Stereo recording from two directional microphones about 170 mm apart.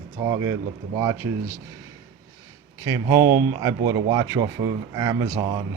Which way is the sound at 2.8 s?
20° right (ahead or behind).